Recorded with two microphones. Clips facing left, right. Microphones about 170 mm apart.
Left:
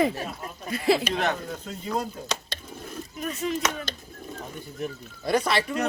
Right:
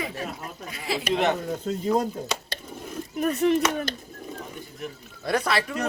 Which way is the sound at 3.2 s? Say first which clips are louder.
Right 7 dB; 60° right (ahead or behind).